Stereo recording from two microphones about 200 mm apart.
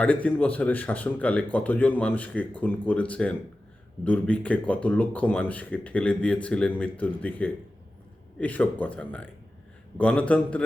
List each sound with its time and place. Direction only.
0.0 s speech: 5° left (ahead or behind)